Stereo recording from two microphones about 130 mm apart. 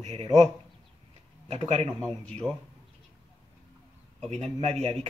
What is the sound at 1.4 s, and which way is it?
Speech, 55° right (ahead or behind).